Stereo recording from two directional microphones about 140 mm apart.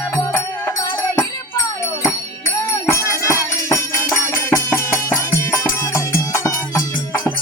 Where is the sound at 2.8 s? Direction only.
20° left (ahead or behind).